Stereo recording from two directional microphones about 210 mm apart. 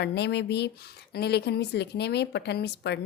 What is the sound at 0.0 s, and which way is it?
Speech, 55° left (ahead or behind).